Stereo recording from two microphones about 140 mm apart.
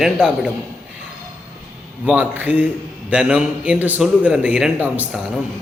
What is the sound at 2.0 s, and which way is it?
Speech, 10° right (ahead or behind).